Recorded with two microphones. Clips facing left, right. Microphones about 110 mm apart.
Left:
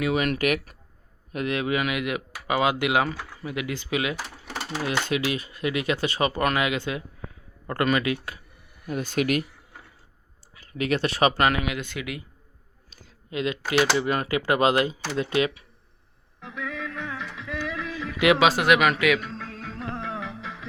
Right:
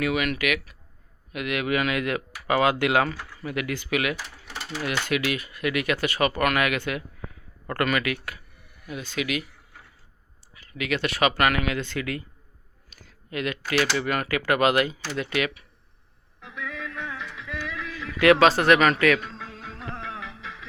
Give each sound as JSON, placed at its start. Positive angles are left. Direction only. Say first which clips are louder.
{"t": 0.1, "sound": "speech", "louder": "left 2 dB", "side_deg": 35}
{"t": 1.3, "sound": "speech", "louder": "left 1 dB", "side_deg": 30}
{"t": 8.9, "sound": "speech", "louder": "left 5 dB", "side_deg": 45}
{"t": 10.8, "sound": "speech", "louder": "left 2 dB", "side_deg": 35}
{"t": 12.9, "sound": "a sound", "louder": "left 1 dB", "side_deg": 20}
{"t": 13.9, "sound": "speech", "louder": "left 2 dB", "side_deg": 25}
{"t": 16.4, "sound": "music", "louder": "left 2 dB", "side_deg": 25}
{"t": 17.6, "sound": "speech", "louder": "left 4 dB", "side_deg": 25}
{"t": 19.4, "sound": "music", "louder": "left 3 dB", "side_deg": -10}